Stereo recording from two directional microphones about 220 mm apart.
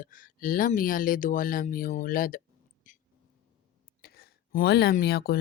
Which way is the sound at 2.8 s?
35° left (ahead or behind).